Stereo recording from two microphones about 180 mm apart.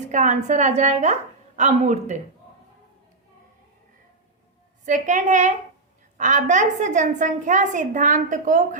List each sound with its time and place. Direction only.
0.1 s a woman's voice: 40° right (ahead or behind)
4.9 s a woman's voice: 45° right (ahead or behind)